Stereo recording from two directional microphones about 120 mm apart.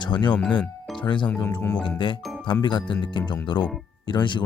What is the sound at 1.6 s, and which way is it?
Speech, 15° left (ahead or behind).